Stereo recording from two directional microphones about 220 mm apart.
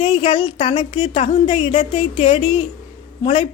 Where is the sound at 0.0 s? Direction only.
25° left (ahead or behind).